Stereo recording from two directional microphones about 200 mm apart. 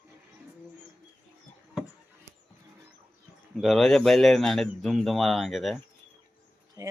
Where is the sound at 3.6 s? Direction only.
Centre (ahead or behind).